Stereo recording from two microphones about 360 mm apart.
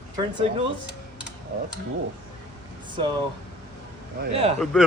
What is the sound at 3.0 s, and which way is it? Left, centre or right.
Speech, centre.